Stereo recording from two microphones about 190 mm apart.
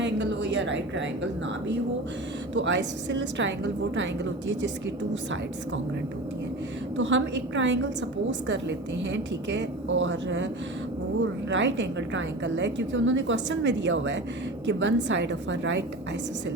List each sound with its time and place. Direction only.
0.0 s a woman's voice: 70° right (ahead or behind)
6.9 s a woman's voice: 75° right (ahead or behind)